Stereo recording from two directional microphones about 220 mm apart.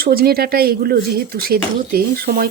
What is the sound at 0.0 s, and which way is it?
Speech, 45° right (ahead or behind).